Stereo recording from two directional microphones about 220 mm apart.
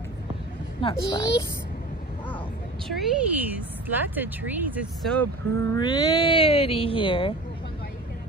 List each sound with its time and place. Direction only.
0.7 s speech: 20° left (ahead or behind)
2.9 s speech: 5° right (ahead or behind)
5.2 s speech: 15° left (ahead or behind)